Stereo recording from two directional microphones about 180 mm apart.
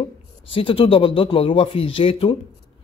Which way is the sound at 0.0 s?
30° left (ahead or behind).